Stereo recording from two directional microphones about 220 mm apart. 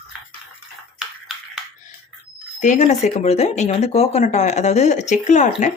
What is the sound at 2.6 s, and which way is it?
Speech, 35° left (ahead or behind).